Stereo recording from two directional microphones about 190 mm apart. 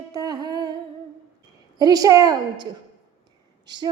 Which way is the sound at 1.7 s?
20° right (ahead or behind).